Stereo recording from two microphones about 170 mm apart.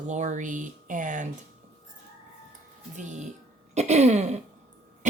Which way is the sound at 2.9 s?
45° right (ahead or behind).